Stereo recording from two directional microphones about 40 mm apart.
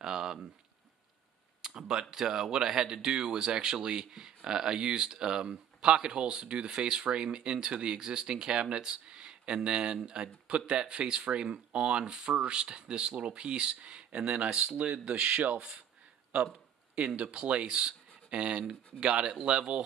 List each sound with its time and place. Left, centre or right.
0.0 s a sound: centre
1.6 s speech: centre; by 15.5 s right
15.5 s speech: centre
16.9 s speech: right